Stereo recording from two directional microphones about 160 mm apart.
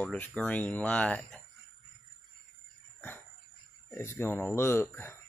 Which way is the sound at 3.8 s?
15° left (ahead or behind).